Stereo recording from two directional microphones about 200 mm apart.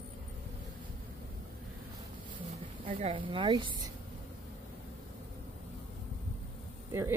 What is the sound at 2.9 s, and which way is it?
Speech, 30° right (ahead or behind).